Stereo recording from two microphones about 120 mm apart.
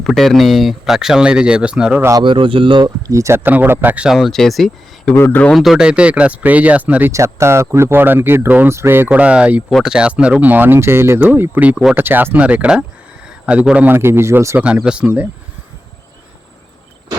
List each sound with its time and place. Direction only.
0.0 s speech: centre (ahead or behind)
2.0 s speech: 25° right (ahead or behind)
2.2 s speech: 45° right (ahead or behind)
3.1 s speech: 25° right (ahead or behind); by 5.1 s 5° left (ahead or behind)
5.1 s speech: 15° left (ahead or behind)
5.5 s speech: 5° right (ahead or behind)
7.1 s speech: 25° right (ahead or behind)